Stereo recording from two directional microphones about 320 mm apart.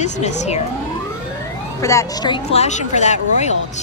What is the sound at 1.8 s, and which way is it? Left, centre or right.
Speech, centre.